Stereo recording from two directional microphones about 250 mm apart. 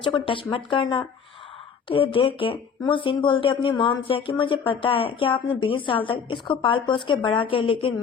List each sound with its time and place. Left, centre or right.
0.0 s speech: centre